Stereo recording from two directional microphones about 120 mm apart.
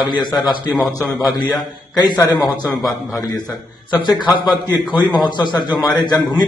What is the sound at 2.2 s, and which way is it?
A man's voice, 35° left (ahead or behind).